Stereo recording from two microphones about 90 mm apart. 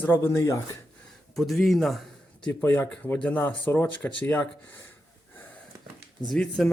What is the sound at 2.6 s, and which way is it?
Speech, 25° left (ahead or behind).